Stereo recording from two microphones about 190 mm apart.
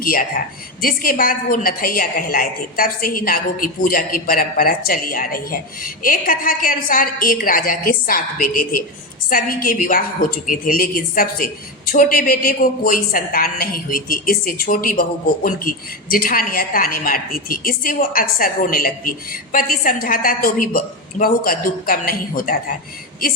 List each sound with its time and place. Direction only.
0.0 s a woman's voice: 50° left (ahead or behind)